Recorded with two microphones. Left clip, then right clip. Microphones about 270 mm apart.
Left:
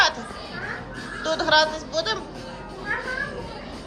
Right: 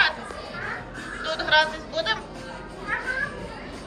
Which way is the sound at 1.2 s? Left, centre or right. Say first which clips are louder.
Left 2 dB; centre.